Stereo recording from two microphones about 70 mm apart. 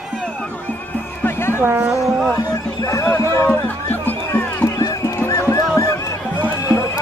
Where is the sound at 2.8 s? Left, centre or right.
Left.